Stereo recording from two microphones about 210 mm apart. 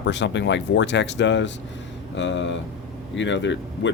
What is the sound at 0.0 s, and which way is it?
Speech, 55° left (ahead or behind).